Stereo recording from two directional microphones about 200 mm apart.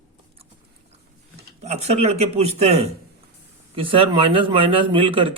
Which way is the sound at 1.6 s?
35° right (ahead or behind).